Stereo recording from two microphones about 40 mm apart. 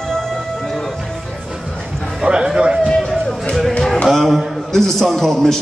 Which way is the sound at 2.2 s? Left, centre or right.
Right.